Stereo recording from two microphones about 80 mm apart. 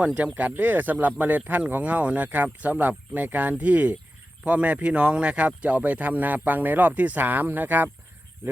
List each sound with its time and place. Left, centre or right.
0.0 s speech: centre